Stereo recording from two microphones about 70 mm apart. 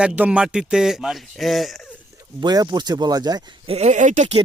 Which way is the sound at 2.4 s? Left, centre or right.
Right.